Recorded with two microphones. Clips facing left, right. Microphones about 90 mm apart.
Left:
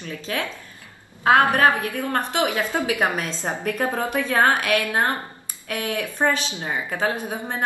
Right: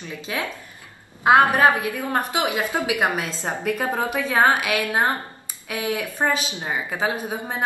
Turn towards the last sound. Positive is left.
turn(degrees=-15)  # may be behind; listen again after turning